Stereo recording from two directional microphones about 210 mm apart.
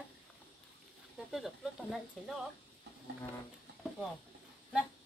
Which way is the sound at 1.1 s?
Centre (ahead or behind).